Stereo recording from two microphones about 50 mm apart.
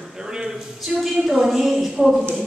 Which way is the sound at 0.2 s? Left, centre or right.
Centre.